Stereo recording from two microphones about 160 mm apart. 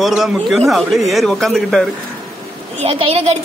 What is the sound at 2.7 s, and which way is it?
Speech, 35° right (ahead or behind).